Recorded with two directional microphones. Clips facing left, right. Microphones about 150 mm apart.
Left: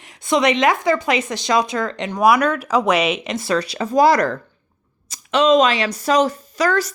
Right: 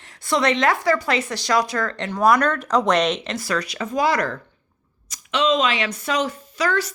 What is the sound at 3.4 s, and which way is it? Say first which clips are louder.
A woman's voice: left 4 dB; 25° left (ahead or behind).